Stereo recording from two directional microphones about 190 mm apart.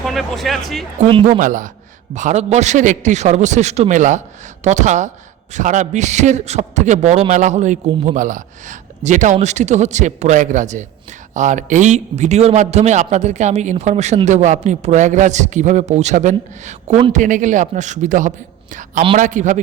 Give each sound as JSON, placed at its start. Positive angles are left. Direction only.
{"t": 0.0, "sound": "speech", "side_deg": 0}
{"t": 1.0, "sound": "speech", "side_deg": -30}
{"t": 1.4, "sound": "a man's voice", "side_deg": -45}